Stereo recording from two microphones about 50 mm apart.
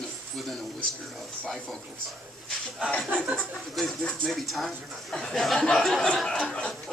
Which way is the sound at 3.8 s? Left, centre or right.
Centre.